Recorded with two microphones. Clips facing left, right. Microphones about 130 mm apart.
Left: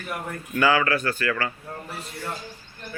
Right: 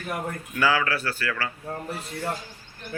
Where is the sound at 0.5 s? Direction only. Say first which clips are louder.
Left 3 dB; 5° right (ahead or behind).